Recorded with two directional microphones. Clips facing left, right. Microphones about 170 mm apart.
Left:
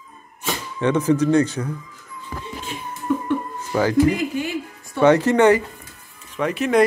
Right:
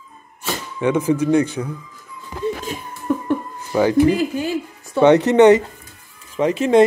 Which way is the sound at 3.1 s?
45° right (ahead or behind).